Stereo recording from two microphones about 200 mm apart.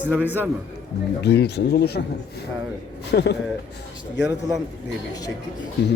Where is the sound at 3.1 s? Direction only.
55° left (ahead or behind).